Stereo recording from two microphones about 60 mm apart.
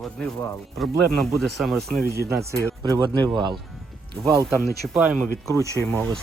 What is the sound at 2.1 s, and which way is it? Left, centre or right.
Speech, right.